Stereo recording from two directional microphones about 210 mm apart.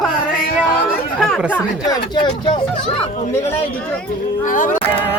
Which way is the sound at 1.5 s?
15° left (ahead or behind).